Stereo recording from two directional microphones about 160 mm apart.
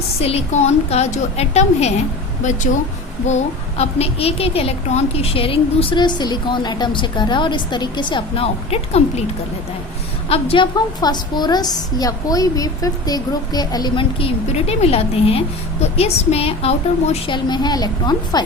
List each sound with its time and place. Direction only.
0.2 s a woman's voice: 40° left (ahead or behind)
10.2 s a woman's voice: 35° left (ahead or behind)